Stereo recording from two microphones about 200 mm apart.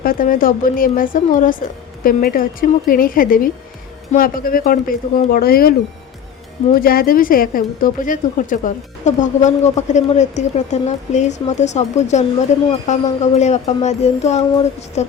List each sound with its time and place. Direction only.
0.0 s a woman's voice: 45° left (ahead or behind)
6.7 s speech: 50° left (ahead or behind)